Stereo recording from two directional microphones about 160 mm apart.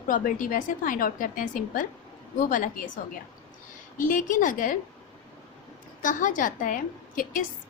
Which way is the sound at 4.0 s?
55° left (ahead or behind).